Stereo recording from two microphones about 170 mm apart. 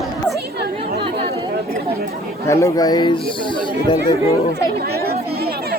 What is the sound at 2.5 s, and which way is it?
Speech, 20° left (ahead or behind).